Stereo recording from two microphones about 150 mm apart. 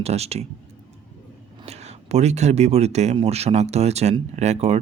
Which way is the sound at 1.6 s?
45° right (ahead or behind).